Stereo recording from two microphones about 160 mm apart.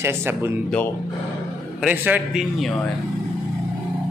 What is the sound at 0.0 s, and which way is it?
Speech, 15° right (ahead or behind).